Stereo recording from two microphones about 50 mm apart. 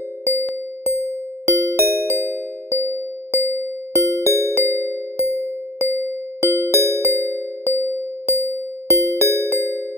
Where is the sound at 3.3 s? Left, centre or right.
Right.